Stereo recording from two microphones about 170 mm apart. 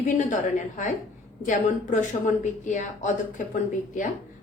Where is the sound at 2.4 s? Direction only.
45° left (ahead or behind).